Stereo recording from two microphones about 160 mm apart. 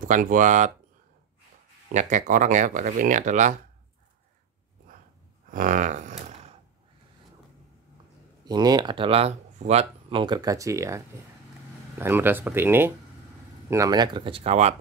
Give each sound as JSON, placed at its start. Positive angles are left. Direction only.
{"t": 0.0, "sound": "speech", "side_deg": -55}
{"t": 2.0, "sound": "speech", "side_deg": -50}
{"t": 5.5, "sound": "a sound", "side_deg": -55}
{"t": 8.5, "sound": "speech", "side_deg": -25}
{"t": 12.0, "sound": "speech", "side_deg": -15}